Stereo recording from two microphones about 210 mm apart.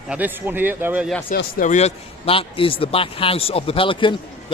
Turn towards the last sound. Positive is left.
turn(degrees=25)  # may be behind; listen again after turning